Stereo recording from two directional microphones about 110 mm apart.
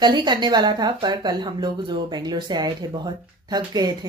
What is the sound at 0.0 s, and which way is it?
Speech, 45° right (ahead or behind).